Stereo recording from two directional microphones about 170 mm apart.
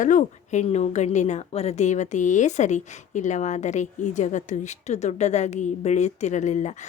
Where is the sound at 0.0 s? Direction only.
50° left (ahead or behind).